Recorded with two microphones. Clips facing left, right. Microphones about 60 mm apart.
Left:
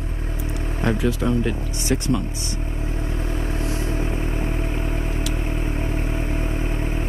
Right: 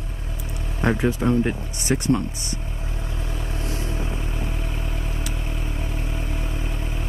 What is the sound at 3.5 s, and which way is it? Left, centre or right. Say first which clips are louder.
Vehicle: left 2 dB; left.